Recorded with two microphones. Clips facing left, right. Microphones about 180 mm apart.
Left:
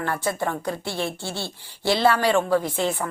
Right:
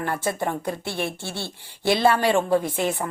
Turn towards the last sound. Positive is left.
turn(degrees=-20)  # may be behind; listen again after turning